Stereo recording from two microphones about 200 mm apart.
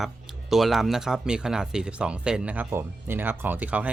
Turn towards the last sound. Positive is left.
turn(degrees=-5)  # may be behind; listen again after turning